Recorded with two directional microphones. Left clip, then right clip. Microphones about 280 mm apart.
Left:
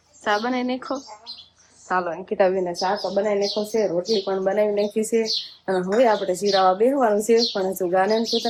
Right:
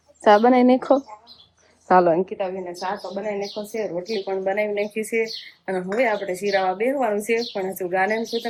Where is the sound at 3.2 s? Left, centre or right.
Centre.